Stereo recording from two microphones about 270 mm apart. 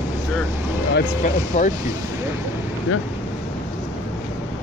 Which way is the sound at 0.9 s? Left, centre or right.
Left.